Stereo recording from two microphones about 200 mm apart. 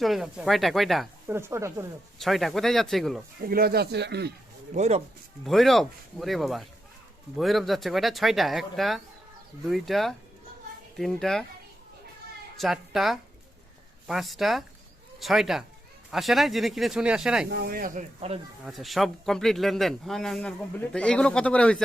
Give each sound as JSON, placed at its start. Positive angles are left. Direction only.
{"t": 0.0, "sound": "a man's voice", "side_deg": 0}
{"t": 1.3, "sound": "stir", "side_deg": -15}
{"t": 2.1, "sound": "a man's voice", "side_deg": 0}
{"t": 3.4, "sound": "speech", "side_deg": -50}
{"t": 4.7, "sound": "speech", "side_deg": -35}
{"t": 5.5, "sound": "a man's voice", "side_deg": 0}
{"t": 12.5, "sound": "a woman's voice", "side_deg": 0}
{"t": 17.5, "sound": "speech", "side_deg": -50}
{"t": 18.6, "sound": "a man's voice", "side_deg": 0}